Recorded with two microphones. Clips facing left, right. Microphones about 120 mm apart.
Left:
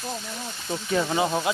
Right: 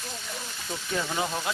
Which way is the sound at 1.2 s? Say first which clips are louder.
Left 6 dB; 25° left (ahead or behind).